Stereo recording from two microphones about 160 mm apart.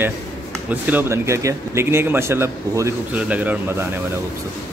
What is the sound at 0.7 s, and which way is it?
Speech, 10° right (ahead or behind).